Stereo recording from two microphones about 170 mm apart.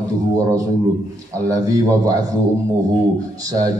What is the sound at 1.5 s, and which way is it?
Speech, 20° right (ahead or behind).